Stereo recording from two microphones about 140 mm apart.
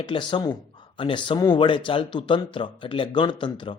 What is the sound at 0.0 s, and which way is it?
Speech, 35° left (ahead or behind).